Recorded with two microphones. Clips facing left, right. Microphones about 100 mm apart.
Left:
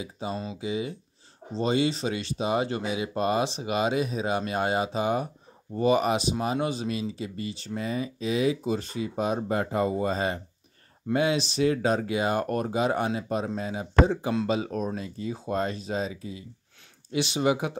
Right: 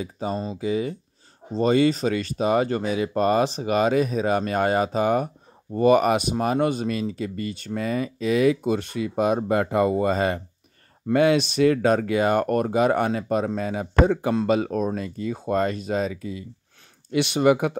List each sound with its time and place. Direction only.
0.0 s speech: 45° right (ahead or behind)